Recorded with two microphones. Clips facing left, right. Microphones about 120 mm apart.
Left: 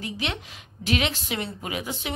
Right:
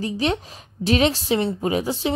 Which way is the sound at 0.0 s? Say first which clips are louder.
Right 9 dB; 35° right (ahead or behind).